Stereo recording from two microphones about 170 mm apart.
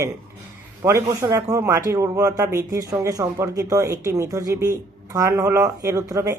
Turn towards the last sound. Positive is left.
turn(degrees=-20)  # may be behind; listen again after turning